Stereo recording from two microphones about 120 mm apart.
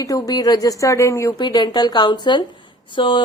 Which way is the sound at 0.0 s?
30° left (ahead or behind).